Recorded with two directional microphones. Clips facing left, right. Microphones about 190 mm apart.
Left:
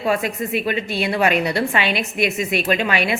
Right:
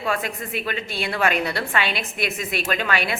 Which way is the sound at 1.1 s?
20° left (ahead or behind).